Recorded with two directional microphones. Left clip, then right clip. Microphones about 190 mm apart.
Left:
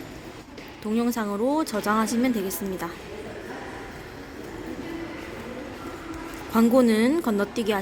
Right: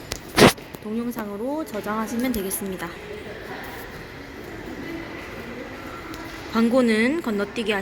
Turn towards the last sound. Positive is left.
turn(degrees=15)  # may be behind; listen again after turning